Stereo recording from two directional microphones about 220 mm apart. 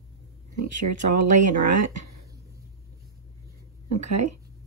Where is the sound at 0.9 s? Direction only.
35° right (ahead or behind).